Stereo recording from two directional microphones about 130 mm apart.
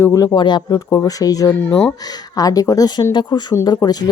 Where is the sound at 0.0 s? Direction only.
25° left (ahead or behind).